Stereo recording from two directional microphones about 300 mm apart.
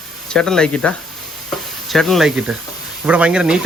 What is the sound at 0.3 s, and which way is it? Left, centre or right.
Speech, centre.